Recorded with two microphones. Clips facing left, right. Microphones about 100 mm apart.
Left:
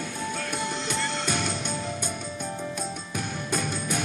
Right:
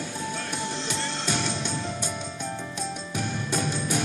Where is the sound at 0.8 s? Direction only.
50° left (ahead or behind).